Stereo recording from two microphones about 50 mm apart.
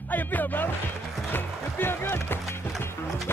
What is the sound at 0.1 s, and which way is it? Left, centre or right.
Speech, left.